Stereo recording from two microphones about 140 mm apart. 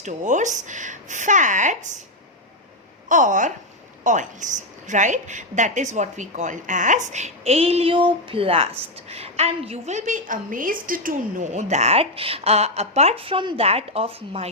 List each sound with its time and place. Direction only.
0.0 s speech: 60° right (ahead or behind)
3.1 s a woman's voice: 65° right (ahead or behind); by 14.5 s 45° right (ahead or behind)